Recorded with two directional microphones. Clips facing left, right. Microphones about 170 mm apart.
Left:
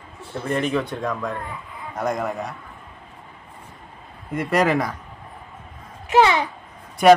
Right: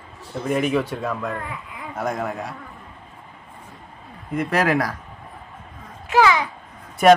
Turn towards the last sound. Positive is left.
turn(degrees=0)  # may be behind; listen again after turning